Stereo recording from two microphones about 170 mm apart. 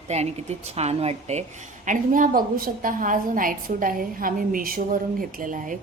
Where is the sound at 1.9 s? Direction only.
50° right (ahead or behind).